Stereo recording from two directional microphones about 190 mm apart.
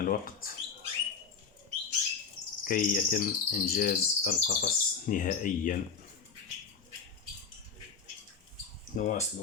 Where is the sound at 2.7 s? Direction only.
45° left (ahead or behind).